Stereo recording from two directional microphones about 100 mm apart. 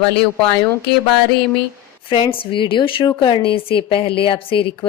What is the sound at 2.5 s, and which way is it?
Speech, 55° left (ahead or behind).